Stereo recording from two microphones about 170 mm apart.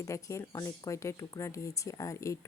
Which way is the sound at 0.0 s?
20° left (ahead or behind).